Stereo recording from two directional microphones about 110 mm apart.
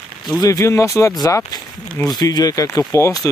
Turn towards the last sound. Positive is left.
turn(degrees=30)  # may be behind; listen again after turning